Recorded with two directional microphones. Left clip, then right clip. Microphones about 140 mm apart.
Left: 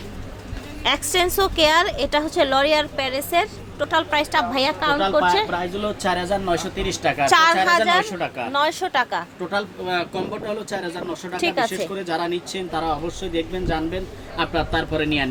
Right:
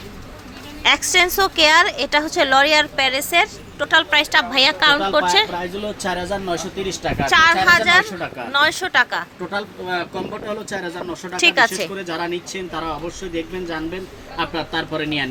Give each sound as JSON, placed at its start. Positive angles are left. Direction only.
{"t": 0.8, "sound": "speech", "side_deg": 5}
{"t": 5.5, "sound": "speech", "side_deg": -10}
{"t": 6.8, "sound": "a woman's voice", "side_deg": 15}
{"t": 7.3, "sound": "a woman's voice", "side_deg": 30}
{"t": 7.5, "sound": "a woman's voice", "side_deg": 10}
{"t": 8.0, "sound": "speech", "side_deg": -15}
{"t": 8.5, "sound": "speech", "side_deg": 5}
{"t": 9.5, "sound": "speech", "side_deg": -5}
{"t": 12.0, "sound": "speech", "side_deg": 0}